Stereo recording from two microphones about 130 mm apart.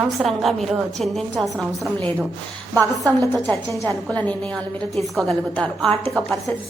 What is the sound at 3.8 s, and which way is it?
Speech, 10° left (ahead or behind).